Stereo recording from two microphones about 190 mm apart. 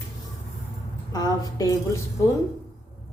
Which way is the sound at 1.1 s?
20° left (ahead or behind).